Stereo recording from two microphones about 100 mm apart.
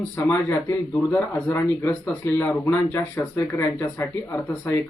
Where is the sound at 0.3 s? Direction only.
20° left (ahead or behind).